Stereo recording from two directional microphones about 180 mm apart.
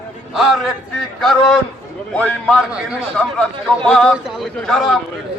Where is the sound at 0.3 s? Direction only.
Centre (ahead or behind).